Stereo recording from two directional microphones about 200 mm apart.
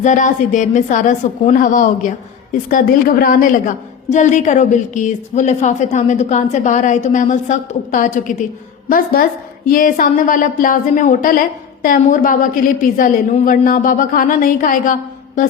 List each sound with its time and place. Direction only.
0.0 s a woman's voice: 40° left (ahead or behind)